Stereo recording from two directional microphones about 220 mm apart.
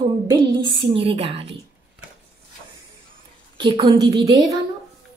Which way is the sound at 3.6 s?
20° right (ahead or behind).